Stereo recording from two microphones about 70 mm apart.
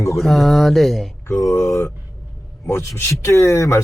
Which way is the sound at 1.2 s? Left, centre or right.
Left.